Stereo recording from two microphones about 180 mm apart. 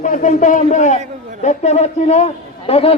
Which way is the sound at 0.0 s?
45° left (ahead or behind).